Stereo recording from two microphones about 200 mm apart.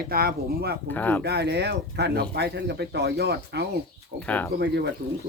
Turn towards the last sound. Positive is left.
turn(degrees=-55)  # may be behind; listen again after turning